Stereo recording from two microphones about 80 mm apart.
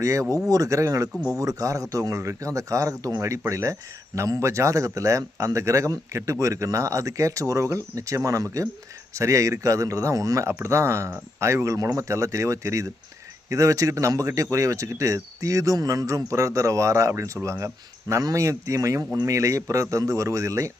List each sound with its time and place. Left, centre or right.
0.0 s speech: right